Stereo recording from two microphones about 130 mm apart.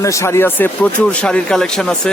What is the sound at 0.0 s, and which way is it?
Speech, 25° left (ahead or behind).